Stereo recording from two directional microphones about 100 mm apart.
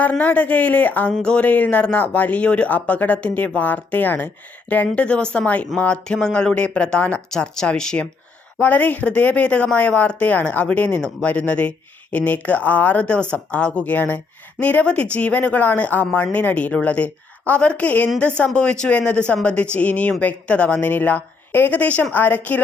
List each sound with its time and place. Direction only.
0.0 s speech: 15° left (ahead or behind)